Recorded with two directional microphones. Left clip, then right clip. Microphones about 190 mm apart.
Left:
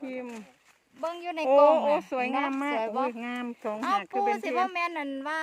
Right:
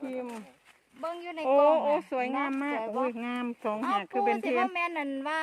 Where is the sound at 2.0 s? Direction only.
15° left (ahead or behind).